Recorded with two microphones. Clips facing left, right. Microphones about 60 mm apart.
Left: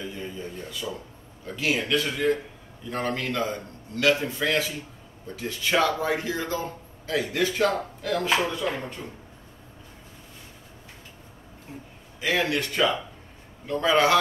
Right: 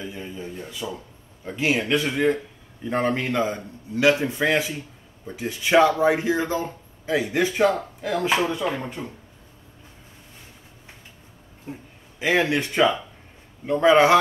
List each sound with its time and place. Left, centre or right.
0.0 s a sound: centre
2.8 s speech: right
12.2 s speech: right